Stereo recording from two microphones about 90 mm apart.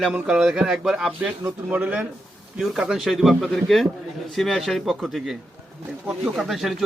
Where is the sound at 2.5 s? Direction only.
5° right (ahead or behind).